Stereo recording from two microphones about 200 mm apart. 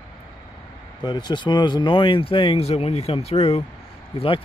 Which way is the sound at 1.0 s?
20° left (ahead or behind).